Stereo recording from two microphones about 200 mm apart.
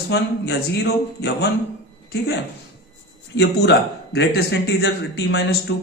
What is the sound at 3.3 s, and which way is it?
A man's voice, 60° left (ahead or behind).